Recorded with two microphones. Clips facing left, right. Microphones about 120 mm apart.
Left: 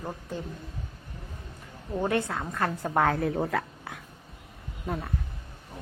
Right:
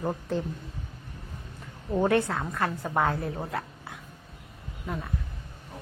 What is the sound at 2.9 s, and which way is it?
Speech, 60° left (ahead or behind).